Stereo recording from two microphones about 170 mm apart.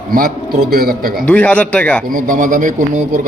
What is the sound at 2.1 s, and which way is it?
Speech, 50° right (ahead or behind).